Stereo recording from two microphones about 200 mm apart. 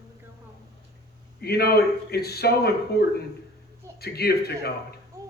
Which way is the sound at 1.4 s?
50° left (ahead or behind).